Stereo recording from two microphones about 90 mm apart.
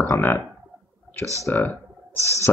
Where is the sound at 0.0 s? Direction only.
25° left (ahead or behind).